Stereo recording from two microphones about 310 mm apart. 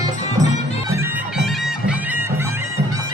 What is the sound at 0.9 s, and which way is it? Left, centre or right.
Bagpipes, centre.